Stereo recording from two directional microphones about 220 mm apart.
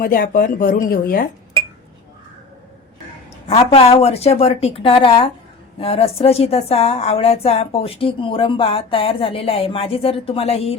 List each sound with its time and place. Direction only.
0.0 s speech: 40° left (ahead or behind)
3.5 s a woman's voice: 25° left (ahead or behind)